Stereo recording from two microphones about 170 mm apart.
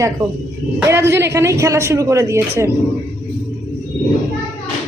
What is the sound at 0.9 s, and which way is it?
A woman's voice, 15° right (ahead or behind).